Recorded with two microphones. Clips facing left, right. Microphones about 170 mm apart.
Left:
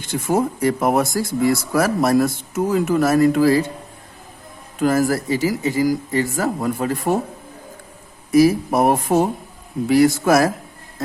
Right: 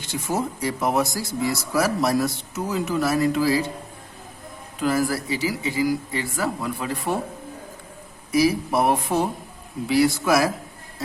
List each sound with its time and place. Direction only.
0.0 s speech: 55° left (ahead or behind)
4.8 s speech: 50° left (ahead or behind)
8.3 s speech: 45° left (ahead or behind)